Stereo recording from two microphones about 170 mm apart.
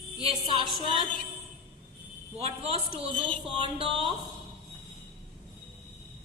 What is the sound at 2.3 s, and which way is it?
A woman's voice, 40° right (ahead or behind).